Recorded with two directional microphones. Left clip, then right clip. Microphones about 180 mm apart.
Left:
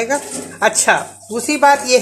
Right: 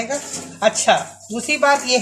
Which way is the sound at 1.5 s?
25° left (ahead or behind).